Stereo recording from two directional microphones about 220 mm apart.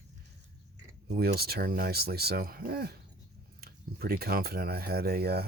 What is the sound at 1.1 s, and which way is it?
Speech, 45° right (ahead or behind).